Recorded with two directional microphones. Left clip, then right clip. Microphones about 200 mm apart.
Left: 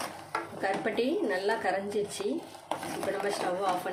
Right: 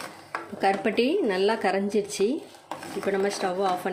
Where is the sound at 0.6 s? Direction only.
45° right (ahead or behind).